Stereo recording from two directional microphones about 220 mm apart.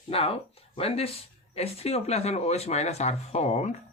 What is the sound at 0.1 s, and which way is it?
Speech, 25° left (ahead or behind).